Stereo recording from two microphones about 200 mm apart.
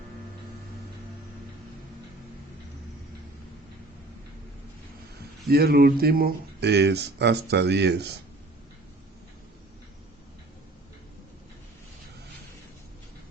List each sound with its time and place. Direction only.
5.5 s speech: 50° right (ahead or behind)